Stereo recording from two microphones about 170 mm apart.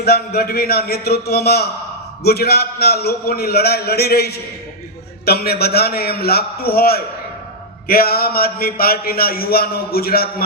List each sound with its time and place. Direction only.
0.0 s a man's voice: 65° left (ahead or behind)